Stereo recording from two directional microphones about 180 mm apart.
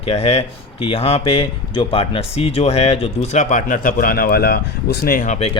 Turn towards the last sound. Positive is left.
turn(degrees=40)  # may be behind; listen again after turning